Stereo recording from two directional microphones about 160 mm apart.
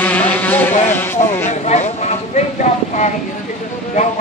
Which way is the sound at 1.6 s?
40° left (ahead or behind).